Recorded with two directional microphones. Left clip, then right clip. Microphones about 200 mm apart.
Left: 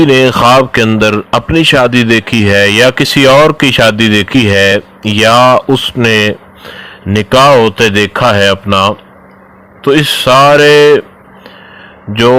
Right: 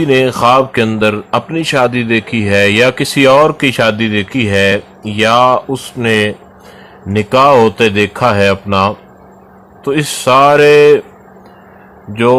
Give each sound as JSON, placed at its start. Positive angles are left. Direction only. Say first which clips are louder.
{"t": 0.0, "sound": "a man's voice", "louder": "left 4 dB", "side_deg": 25}
{"t": 12.1, "sound": "a man's voice", "louder": "left 3 dB", "side_deg": 25}